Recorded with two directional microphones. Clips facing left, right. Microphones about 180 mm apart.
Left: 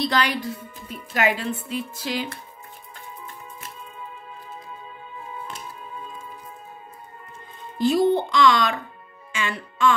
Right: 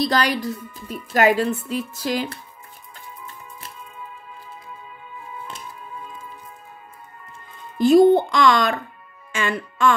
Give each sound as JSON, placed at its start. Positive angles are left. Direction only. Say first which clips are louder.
{"t": 0.0, "sound": "a woman's voice", "louder": "right 3 dB", "side_deg": -40}
{"t": 7.8, "sound": "speech", "louder": "right 6 dB", "side_deg": -50}
{"t": 9.3, "sound": "music", "louder": "right 4 dB", "side_deg": -50}